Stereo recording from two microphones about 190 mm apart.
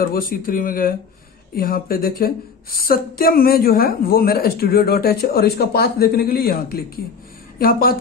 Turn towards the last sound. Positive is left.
turn(degrees=50)  # may be behind; listen again after turning